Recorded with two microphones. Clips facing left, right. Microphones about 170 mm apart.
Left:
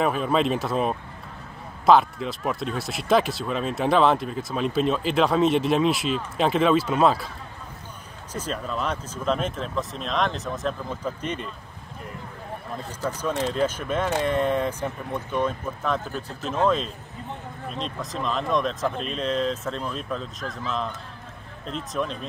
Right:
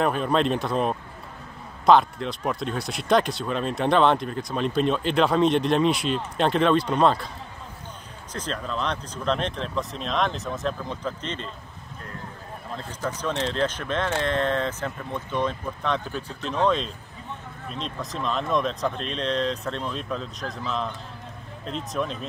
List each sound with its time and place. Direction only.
0.0 s speech: centre (ahead or behind)
8.3 s speech: 10° left (ahead or behind)
12.7 s speech: 10° left (ahead or behind)
16.2 s speech: 40° left (ahead or behind)
16.4 s speech: 5° left (ahead or behind)